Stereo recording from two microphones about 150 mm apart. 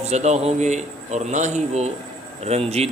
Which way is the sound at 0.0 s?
50° right (ahead or behind).